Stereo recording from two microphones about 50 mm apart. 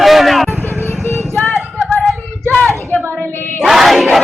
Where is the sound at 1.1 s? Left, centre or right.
Left.